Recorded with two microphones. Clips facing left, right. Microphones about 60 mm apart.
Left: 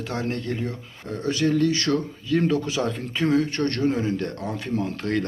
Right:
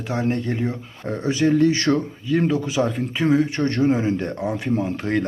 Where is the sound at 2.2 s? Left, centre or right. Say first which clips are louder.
Right 1 dB; centre.